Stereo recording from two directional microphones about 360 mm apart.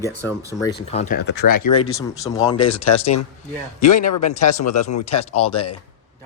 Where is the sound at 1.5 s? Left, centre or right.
Left.